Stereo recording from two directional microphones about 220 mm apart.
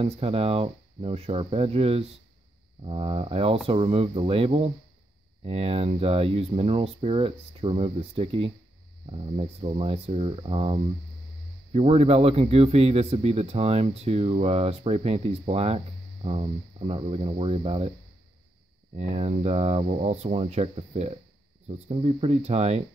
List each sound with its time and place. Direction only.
0.0 s speech: 25° right (ahead or behind)
18.9 s speech: 30° right (ahead or behind)